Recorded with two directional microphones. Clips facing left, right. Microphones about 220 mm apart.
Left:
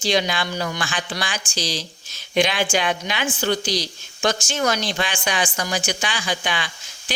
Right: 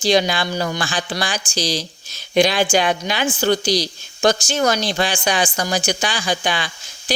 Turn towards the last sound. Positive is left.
turn(degrees=-35)  # may be behind; listen again after turning